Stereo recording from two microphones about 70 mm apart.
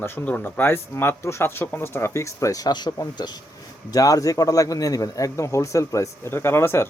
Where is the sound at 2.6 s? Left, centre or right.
Left.